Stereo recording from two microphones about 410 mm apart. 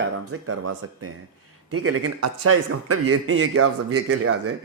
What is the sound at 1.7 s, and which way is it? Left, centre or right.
A man's voice, right.